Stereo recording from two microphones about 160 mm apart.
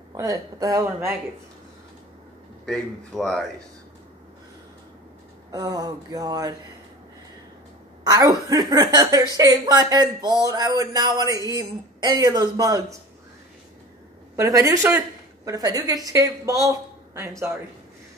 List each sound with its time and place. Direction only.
0.1 s speech: 20° right (ahead or behind)
2.6 s a man's voice: centre (ahead or behind)
5.5 s speech: 20° right (ahead or behind)
8.0 s speech: 25° right (ahead or behind)
14.3 s a woman's voice: 20° right (ahead or behind)
16.6 s a sound: 20° right (ahead or behind)